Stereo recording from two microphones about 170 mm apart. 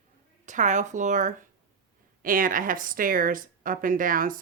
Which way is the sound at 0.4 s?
45° right (ahead or behind).